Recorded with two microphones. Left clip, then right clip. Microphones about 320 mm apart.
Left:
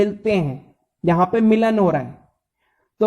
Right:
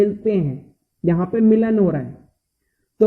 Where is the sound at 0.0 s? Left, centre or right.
Left.